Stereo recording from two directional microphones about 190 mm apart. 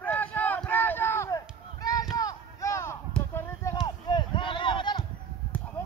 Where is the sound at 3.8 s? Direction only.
25° left (ahead or behind).